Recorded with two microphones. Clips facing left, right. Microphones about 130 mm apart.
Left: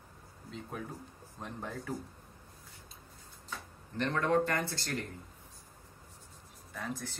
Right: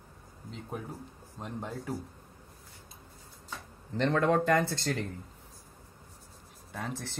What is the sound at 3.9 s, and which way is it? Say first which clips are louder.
Speech: right 3 dB; 90° right.